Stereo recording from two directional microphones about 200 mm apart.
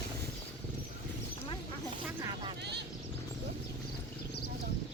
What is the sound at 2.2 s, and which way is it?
Vehicle, 20° right (ahead or behind).